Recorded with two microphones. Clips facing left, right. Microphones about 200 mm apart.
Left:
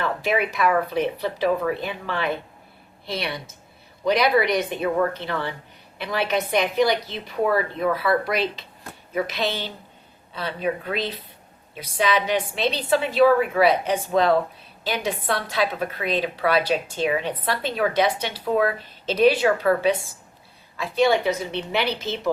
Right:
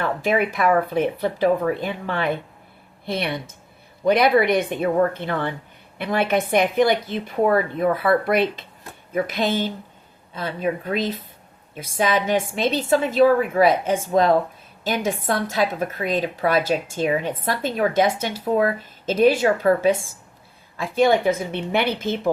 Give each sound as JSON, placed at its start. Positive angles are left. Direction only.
{"t": 0.2, "sound": "a woman's voice", "side_deg": -50}
{"t": 18.4, "sound": "speech", "side_deg": -25}
{"t": 18.8, "sound": "a woman's voice", "side_deg": -50}